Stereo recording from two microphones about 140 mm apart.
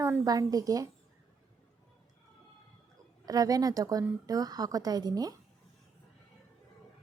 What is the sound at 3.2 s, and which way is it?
A woman's voice, 25° right (ahead or behind).